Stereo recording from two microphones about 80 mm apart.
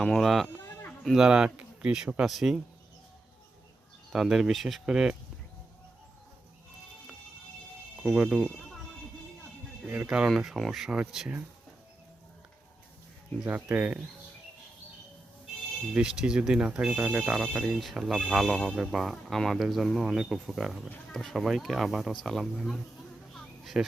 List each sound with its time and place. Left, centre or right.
0.0 s speech: centre
0.6 s livestock: left
1.0 s speech: centre
4.1 s speech: centre
7.9 s speech: centre
9.9 s speech: centre
10.2 s speech: centre
13.4 s speech: right
15.9 s speech: centre
23.3 s a sound: centre